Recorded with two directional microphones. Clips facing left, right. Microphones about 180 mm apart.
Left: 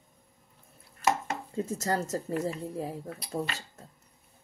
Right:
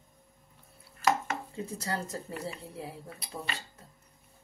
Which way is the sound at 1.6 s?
45° left (ahead or behind).